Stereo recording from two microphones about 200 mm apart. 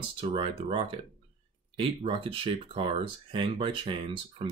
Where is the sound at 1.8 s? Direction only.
25° right (ahead or behind).